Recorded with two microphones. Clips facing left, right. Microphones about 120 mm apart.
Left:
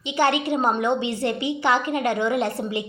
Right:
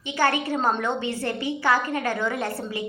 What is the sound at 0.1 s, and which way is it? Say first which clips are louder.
A woman's voice: left 2 dB; 20° left (ahead or behind).